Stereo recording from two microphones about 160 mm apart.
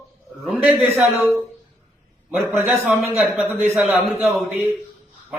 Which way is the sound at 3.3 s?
15° right (ahead or behind).